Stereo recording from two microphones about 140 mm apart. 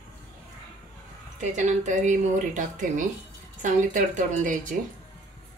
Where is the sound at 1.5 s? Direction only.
60° right (ahead or behind).